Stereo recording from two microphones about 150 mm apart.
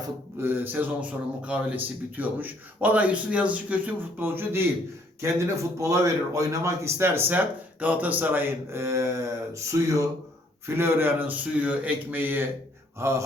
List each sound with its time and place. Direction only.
0.3 s a man's voice: 15° right (ahead or behind)
10.8 s a man's voice: 15° right (ahead or behind)